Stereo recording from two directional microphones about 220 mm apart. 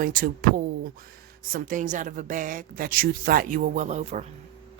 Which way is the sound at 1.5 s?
35° right (ahead or behind).